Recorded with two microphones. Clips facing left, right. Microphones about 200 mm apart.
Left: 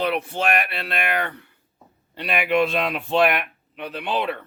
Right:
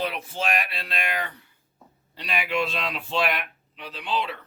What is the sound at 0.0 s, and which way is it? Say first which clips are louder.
Speech: left 5 dB; 60° left (ahead or behind).